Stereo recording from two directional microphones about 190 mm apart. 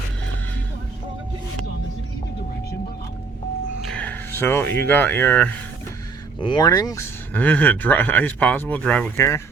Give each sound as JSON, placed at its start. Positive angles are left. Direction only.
{"t": 3.8, "sound": "speech", "side_deg": 10}
{"t": 6.4, "sound": "speech", "side_deg": 20}
{"t": 7.3, "sound": "speech", "side_deg": 10}